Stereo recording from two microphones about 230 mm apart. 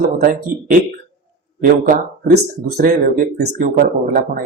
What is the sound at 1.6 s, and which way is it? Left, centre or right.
Speech, right.